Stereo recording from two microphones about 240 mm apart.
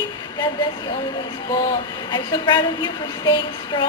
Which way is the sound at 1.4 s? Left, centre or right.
Centre.